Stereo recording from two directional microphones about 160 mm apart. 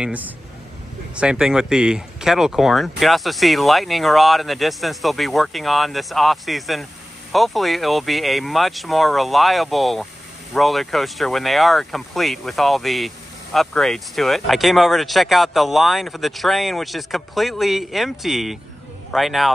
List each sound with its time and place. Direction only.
0.0 s speech: 10° right (ahead or behind)